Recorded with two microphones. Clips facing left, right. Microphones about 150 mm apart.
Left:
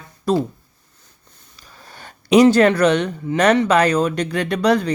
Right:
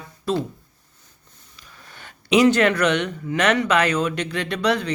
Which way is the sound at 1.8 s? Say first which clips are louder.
Left 4 dB; 35° left (ahead or behind).